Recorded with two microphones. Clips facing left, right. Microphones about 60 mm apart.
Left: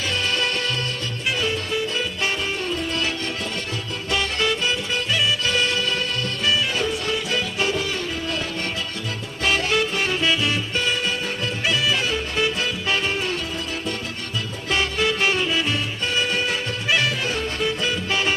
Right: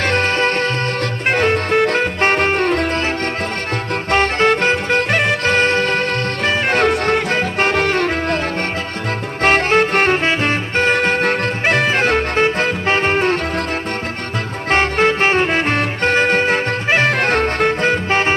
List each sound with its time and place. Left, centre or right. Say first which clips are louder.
0.0 s music: right 8 dB; right
4.1 s music: right 9 dB; right
9.4 s music: right 8 dB; right
14.7 s music: right 8 dB; right